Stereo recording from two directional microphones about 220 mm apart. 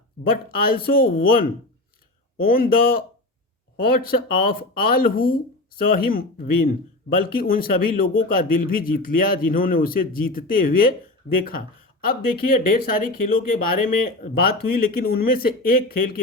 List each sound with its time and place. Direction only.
0.6 s speech: 45° left (ahead or behind)
2.4 s speech: 40° left (ahead or behind)
12.0 s speech: 40° left (ahead or behind)